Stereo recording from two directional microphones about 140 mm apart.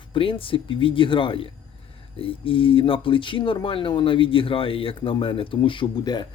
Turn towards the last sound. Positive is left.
turn(degrees=35)  # may be behind; listen again after turning